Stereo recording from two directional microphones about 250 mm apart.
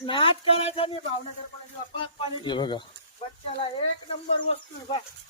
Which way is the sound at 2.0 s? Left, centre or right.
Centre.